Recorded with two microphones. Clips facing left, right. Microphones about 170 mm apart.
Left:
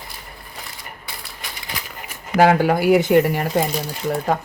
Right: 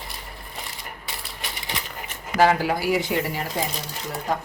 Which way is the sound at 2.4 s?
55° left (ahead or behind).